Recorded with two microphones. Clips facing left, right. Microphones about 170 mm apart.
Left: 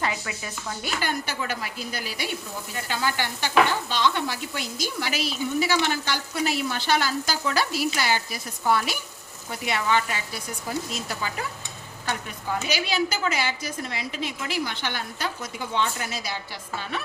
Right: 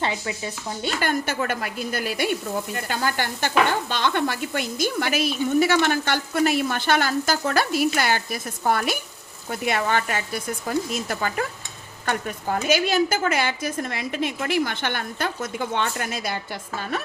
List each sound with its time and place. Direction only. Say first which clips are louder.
0.0 s speech: right 3 dB; 25° right (ahead or behind)
1.0 s speech: right 5 dB; 50° right (ahead or behind)